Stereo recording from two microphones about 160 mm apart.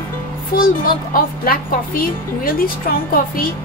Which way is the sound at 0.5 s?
65° left (ahead or behind).